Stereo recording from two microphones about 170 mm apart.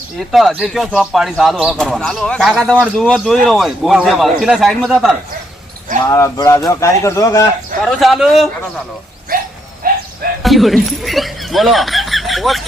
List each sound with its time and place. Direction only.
0.2 s speech: centre (ahead or behind)
6.0 s speech: 20° left (ahead or behind)
7.8 s speech: centre (ahead or behind)
9.8 s a sound: 60° right (ahead or behind)
10.4 s speech: centre (ahead or behind)